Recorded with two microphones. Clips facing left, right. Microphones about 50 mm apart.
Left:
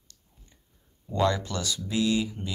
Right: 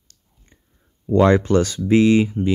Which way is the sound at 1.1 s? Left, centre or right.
Right.